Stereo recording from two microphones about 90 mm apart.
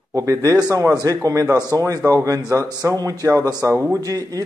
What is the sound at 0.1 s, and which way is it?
Speech, 40° right (ahead or behind).